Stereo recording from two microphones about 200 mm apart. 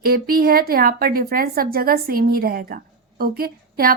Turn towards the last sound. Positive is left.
turn(degrees=-50)  # may be behind; listen again after turning